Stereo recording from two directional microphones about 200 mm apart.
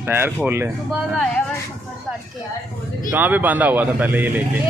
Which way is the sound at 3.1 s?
10° right (ahead or behind).